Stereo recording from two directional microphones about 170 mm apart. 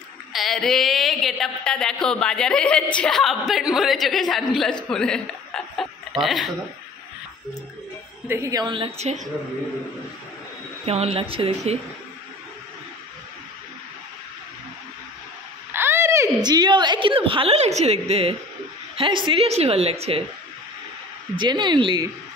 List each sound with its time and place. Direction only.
0.3 s a woman's voice: centre (ahead or behind)
8.3 s a woman's voice: 20° right (ahead or behind); by 9.2 s 40° right (ahead or behind)
10.9 s a woman's voice: 35° right (ahead or behind)
15.7 s a sound: 15° right (ahead or behind)
16.4 s a woman's voice: 25° right (ahead or behind)
21.4 s a woman's voice: 25° right (ahead or behind)